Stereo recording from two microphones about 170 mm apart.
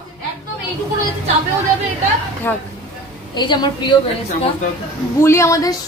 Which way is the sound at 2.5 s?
10° left (ahead or behind).